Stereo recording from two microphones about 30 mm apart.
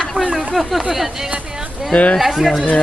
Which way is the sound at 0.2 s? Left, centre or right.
Right.